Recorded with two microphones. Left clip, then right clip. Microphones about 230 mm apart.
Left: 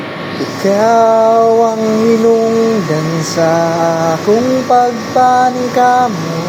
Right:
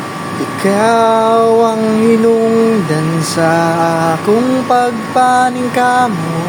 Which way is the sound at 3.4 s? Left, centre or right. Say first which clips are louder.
Even; centre.